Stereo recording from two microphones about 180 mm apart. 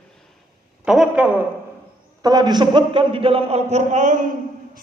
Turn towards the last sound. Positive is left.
turn(degrees=-45)  # may be behind; listen again after turning